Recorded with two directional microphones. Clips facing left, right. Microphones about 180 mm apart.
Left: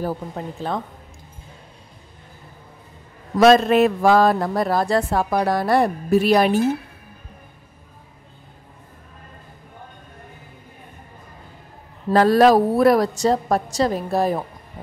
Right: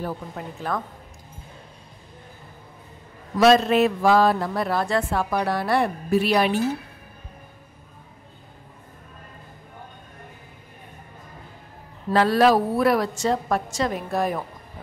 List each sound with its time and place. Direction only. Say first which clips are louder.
0.6 s speech: left 1 dB; 25° left (ahead or behind)
3.3 s a man's voice: left 3 dB; 50° left (ahead or behind)
12.1 s a woman's voice: left 4 dB; 40° left (ahead or behind)